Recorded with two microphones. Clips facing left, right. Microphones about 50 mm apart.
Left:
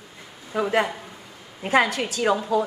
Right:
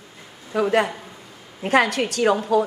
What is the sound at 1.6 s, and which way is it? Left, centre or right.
A woman's voice, right.